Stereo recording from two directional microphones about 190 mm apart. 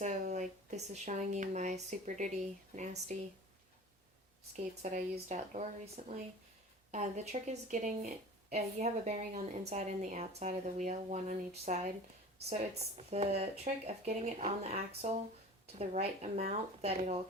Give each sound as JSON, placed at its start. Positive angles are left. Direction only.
{"t": 0.0, "sound": "a sound", "side_deg": -40}
{"t": 1.0, "sound": "a woman's voice", "side_deg": -35}
{"t": 4.5, "sound": "a woman's voice", "side_deg": -40}